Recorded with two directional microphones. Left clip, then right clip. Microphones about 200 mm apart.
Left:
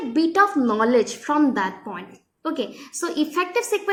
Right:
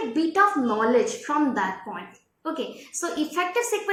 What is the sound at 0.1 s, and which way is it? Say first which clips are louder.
A woman's voice: left 3 dB; 55° left (ahead or behind).